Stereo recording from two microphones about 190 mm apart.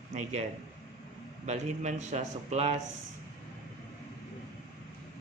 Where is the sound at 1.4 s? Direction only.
40° right (ahead or behind).